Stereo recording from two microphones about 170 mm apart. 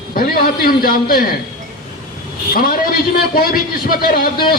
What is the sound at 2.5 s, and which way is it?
A man's voice, 60° left (ahead or behind).